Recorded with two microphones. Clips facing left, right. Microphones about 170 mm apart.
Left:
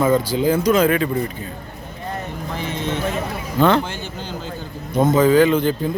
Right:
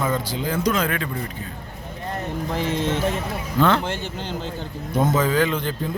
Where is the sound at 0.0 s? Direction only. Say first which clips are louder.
Left 8 dB; 5° left (ahead or behind).